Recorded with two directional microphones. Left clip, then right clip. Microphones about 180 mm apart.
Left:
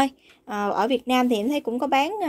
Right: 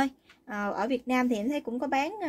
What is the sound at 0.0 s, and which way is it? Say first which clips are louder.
A woman's voice: left 6 dB; 35° left (ahead or behind).